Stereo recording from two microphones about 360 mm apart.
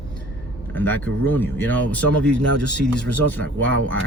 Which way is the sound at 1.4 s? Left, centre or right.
Centre.